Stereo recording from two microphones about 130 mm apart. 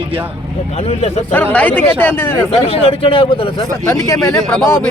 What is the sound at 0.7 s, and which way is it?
Speech, 55° left (ahead or behind).